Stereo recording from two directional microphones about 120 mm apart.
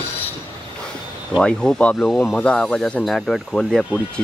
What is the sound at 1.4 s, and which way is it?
Speech, 5° left (ahead or behind).